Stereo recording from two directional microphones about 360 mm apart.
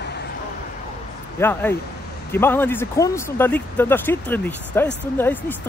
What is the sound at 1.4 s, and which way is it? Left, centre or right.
Speech, centre.